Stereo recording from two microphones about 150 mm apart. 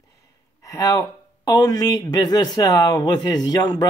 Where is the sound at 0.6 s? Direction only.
20° left (ahead or behind).